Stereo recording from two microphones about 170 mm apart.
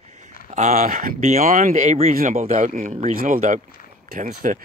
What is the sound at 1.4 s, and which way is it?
Speech, 55° right (ahead or behind).